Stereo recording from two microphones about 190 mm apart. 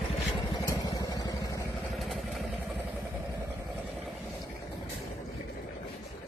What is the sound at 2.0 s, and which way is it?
Vehicle, centre (ahead or behind).